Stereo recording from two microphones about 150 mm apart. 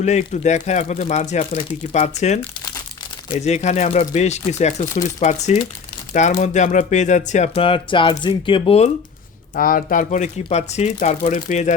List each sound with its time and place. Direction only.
0.0 s speech: 50° left (ahead or behind)
9.6 s speech: 70° left (ahead or behind)